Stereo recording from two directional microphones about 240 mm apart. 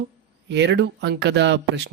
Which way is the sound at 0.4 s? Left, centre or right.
Right.